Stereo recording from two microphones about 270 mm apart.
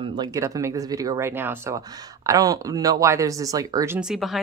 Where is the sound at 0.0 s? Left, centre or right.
Centre.